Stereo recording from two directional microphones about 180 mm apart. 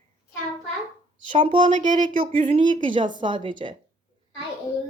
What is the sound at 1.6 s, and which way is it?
Speech, 45° right (ahead or behind).